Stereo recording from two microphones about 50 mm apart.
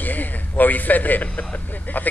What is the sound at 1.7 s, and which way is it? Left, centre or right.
Speech, left.